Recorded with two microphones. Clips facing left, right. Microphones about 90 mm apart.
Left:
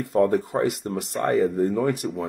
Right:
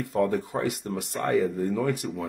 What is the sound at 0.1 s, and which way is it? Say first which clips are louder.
Speech: left 5 dB; 35° left (ahead or behind).